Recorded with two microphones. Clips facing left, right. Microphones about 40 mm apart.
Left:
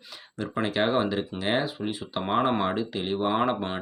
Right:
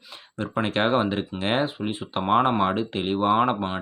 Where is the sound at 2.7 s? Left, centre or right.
Right.